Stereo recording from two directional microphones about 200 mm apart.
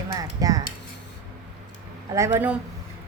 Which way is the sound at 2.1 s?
10° right (ahead or behind).